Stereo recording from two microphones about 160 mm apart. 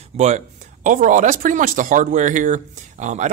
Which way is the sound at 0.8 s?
55° right (ahead or behind).